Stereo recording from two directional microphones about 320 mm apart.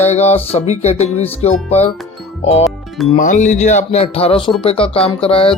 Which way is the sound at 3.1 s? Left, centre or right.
Left.